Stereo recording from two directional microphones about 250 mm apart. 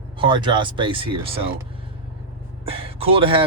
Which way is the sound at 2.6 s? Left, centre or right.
Right.